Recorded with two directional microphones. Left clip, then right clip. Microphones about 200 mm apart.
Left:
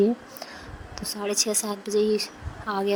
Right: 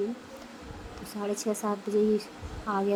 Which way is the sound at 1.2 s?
45° left (ahead or behind).